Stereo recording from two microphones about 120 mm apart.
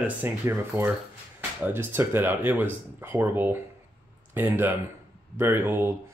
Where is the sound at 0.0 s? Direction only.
20° right (ahead or behind).